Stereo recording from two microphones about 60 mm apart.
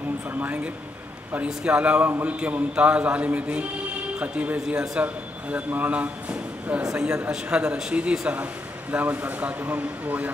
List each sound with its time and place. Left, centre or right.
0.3 s speech: right
1.6 s a man's voice: centre
6.8 s a man's voice: centre